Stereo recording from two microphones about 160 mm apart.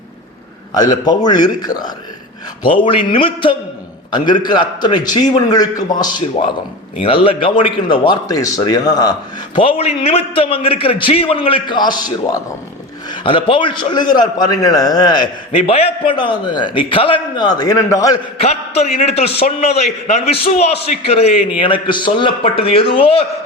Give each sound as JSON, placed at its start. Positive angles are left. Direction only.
{"t": 0.7, "sound": "a man's voice", "side_deg": 25}
{"t": 9.6, "sound": "a man's voice", "side_deg": 35}
{"t": 15.5, "sound": "a man's voice", "side_deg": 40}
{"t": 18.3, "sound": "a man's voice", "side_deg": 40}